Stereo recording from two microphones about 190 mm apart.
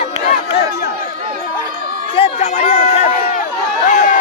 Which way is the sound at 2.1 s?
30° left (ahead or behind).